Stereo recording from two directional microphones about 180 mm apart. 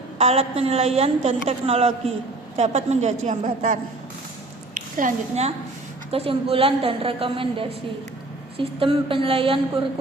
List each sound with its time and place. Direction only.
0.2 s a woman's voice: 35° right (ahead or behind)
6.1 s a woman's voice: 30° right (ahead or behind)